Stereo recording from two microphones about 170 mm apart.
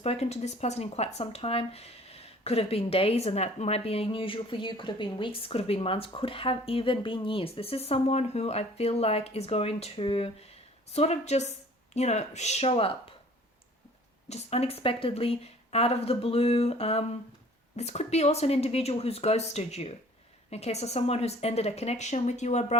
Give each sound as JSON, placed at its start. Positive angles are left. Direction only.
{"t": 0.0, "sound": "speech", "side_deg": 40}
{"t": 14.3, "sound": "speech", "side_deg": 40}